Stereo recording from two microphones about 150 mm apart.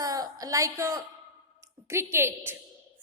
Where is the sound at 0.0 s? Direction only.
25° right (ahead or behind).